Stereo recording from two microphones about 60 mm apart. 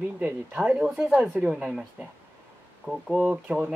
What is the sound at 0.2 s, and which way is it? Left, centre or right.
Speech, right.